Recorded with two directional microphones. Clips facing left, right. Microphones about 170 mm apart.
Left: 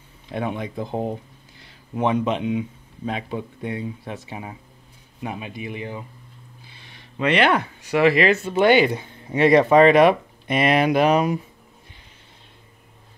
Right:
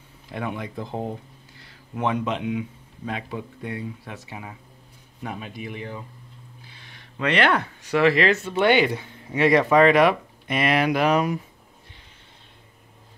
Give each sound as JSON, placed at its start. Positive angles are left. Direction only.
{"t": 0.3, "sound": "speech", "side_deg": 25}
{"t": 5.2, "sound": "speech", "side_deg": 10}
{"t": 7.2, "sound": "speech", "side_deg": 15}